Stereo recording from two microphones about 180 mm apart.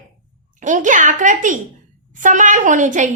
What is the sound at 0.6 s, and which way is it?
A woman's voice, 45° right (ahead or behind).